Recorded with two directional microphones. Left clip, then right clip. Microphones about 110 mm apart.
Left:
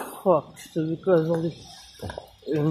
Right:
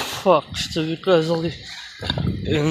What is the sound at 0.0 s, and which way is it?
Speech, 15° right (ahead or behind).